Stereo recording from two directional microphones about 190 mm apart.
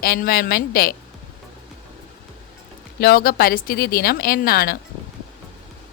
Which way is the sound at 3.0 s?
50° left (ahead or behind).